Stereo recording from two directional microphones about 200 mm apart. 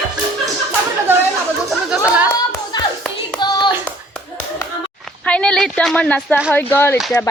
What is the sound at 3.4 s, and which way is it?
Hands, 20° left (ahead or behind).